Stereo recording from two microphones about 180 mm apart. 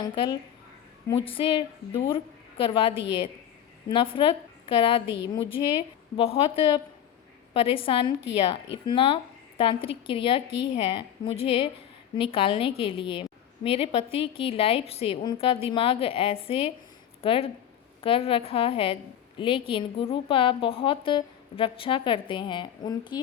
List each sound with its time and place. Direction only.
0.0 s a woman's voice: 25° left (ahead or behind)
5.0 s speech: 80° left
5.3 s a woman's voice: 30° left (ahead or behind)
8.3 s speech: 80° left
8.9 s a woman's voice: 30° left (ahead or behind)